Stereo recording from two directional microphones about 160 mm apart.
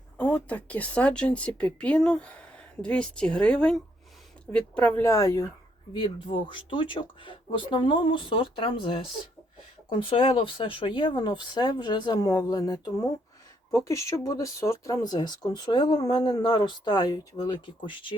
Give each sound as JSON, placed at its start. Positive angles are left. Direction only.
{"t": 0.2, "sound": "speech", "side_deg": 10}
{"t": 10.0, "sound": "speech", "side_deg": 35}